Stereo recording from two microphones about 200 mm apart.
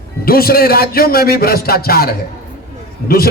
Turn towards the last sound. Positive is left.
turn(degrees=50)  # may be behind; listen again after turning